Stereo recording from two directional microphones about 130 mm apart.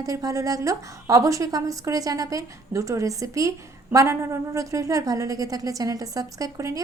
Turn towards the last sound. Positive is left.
turn(degrees=-25)  # may be behind; listen again after turning